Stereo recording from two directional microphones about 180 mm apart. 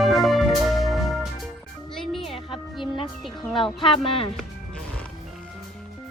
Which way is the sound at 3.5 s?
25° left (ahead or behind).